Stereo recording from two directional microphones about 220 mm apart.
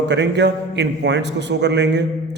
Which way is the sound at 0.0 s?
50° right (ahead or behind).